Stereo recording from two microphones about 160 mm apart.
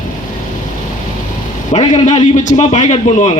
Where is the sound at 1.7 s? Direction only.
50° left (ahead or behind).